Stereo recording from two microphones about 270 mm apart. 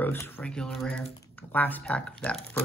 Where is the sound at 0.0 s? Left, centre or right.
Centre.